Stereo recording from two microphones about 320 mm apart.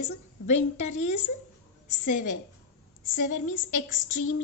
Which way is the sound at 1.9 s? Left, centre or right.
Left.